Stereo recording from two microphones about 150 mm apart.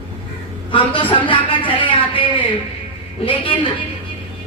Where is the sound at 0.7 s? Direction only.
35° left (ahead or behind).